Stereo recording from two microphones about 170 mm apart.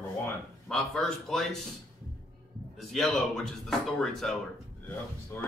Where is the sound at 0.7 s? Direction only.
5° left (ahead or behind).